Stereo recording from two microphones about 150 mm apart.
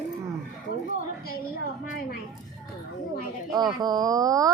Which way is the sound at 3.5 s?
25° right (ahead or behind).